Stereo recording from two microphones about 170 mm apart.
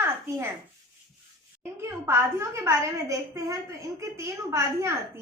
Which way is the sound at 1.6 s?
15° right (ahead or behind).